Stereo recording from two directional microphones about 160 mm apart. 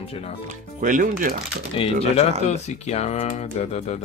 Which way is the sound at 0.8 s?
55° right (ahead or behind).